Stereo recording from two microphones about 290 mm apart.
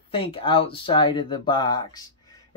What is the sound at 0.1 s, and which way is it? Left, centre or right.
Speech, centre.